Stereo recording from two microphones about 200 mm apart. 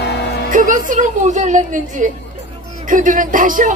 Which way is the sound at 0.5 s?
40° right (ahead or behind).